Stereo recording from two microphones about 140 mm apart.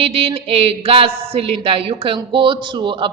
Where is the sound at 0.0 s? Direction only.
40° right (ahead or behind).